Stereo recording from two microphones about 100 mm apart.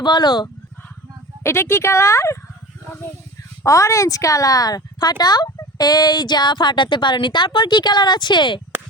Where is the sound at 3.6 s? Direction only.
30° left (ahead or behind).